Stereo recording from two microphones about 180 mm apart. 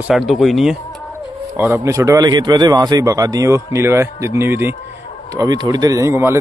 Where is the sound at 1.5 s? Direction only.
15° right (ahead or behind).